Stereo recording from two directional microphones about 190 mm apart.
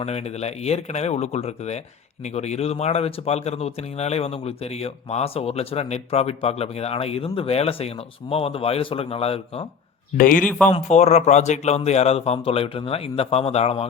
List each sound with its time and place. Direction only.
0.0 s speech: 35° left (ahead or behind)
10.2 s speech: 45° left (ahead or behind)
10.4 s speech: 5° left (ahead or behind)
10.7 s speech: 35° left (ahead or behind)